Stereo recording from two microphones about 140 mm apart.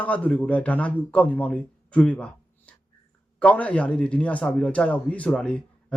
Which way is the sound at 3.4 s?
10° left (ahead or behind).